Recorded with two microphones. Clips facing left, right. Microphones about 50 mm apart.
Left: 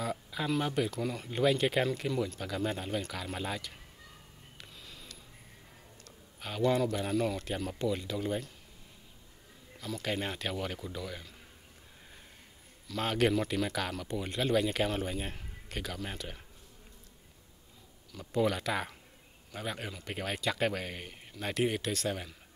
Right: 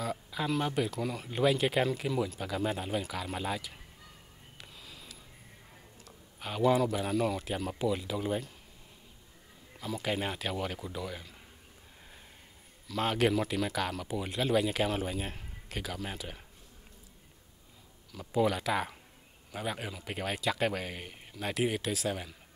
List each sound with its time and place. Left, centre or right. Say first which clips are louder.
0.0 s speech: right 1 dB; centre
4.6 s a sound: right 1 dB; centre
6.0 s speech: right 2 dB; centre
9.8 s speech: right 2 dB; centre
12.8 s speech: right 1 dB; centre
18.1 s speech: right 1 dB; centre